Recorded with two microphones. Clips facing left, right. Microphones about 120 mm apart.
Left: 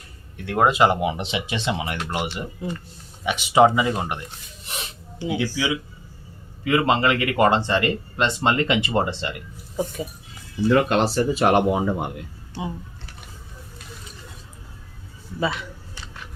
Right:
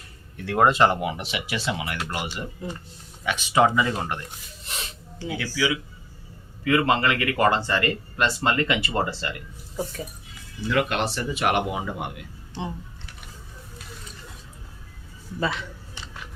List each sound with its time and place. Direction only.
0.3 s speech: centre (ahead or behind)
0.9 s speech: 20° left (ahead or behind)
4.8 s a sound: 15° left (ahead or behind)
6.7 s speech: 20° left (ahead or behind)
10.7 s speech: 35° left (ahead or behind)